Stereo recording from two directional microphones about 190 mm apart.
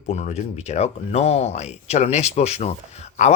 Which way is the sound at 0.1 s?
40° left (ahead or behind).